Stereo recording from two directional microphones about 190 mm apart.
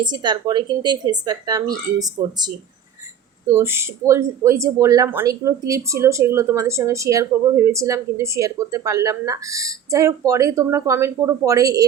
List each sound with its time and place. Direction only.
0.0 s speech: 25° right (ahead or behind)
3.5 s speech: 15° right (ahead or behind)